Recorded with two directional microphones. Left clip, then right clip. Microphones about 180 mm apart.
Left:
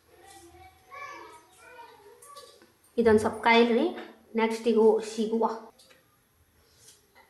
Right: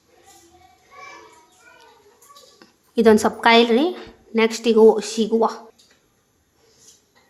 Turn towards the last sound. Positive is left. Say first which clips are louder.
# right 8 dB
turn(degrees=-75)  # may be behind; listen again after turning